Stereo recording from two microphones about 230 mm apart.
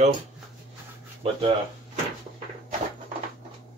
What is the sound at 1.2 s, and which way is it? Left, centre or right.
Speech, right.